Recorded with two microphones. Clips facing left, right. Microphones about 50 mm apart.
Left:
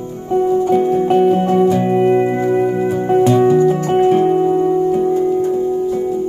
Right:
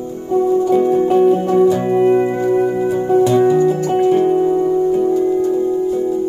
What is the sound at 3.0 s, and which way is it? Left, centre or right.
Music, left.